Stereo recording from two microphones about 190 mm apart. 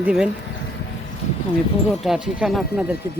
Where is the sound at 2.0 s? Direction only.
Centre (ahead or behind).